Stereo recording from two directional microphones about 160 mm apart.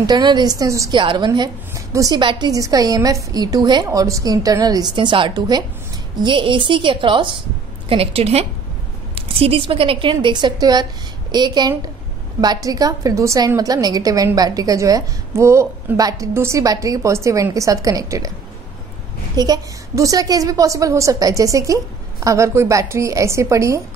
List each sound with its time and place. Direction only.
0.0 s a woman's voice: 25° right (ahead or behind)
19.3 s a woman's voice: 25° right (ahead or behind)